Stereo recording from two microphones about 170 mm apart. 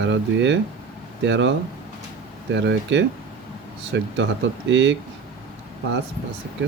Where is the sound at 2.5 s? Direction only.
90° right.